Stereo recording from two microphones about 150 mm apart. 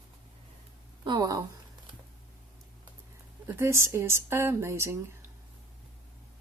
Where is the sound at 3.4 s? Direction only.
20° right (ahead or behind).